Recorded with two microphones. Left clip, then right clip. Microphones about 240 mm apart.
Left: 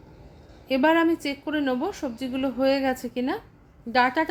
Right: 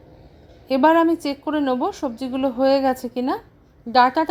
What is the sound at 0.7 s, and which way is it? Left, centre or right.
A woman's voice, centre.